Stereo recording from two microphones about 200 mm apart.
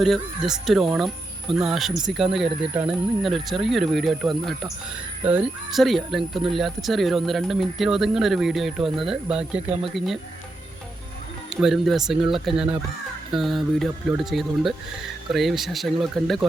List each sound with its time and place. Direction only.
0.0 s speech: centre (ahead or behind)
11.5 s speech: centre (ahead or behind)